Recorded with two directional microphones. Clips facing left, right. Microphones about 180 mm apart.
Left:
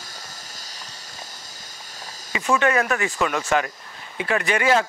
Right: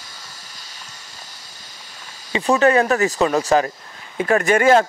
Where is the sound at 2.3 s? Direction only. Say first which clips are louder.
Right 5 dB; 35° right (ahead or behind).